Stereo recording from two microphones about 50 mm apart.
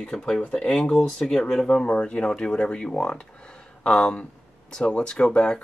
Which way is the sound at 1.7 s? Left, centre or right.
Left.